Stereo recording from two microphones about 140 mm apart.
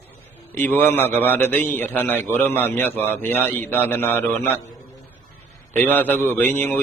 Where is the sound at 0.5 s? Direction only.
15° left (ahead or behind).